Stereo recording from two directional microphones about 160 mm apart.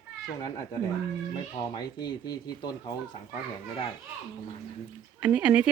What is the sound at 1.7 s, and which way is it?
Speech, 25° left (ahead or behind).